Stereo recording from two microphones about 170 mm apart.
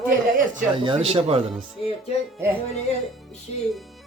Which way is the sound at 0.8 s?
35° right (ahead or behind).